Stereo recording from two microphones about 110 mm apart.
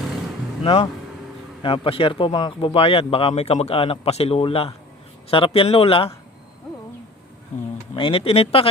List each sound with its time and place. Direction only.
0.6 s speech: 65° left (ahead or behind)
1.6 s speech: 55° left (ahead or behind)
7.9 s speech: 55° left (ahead or behind)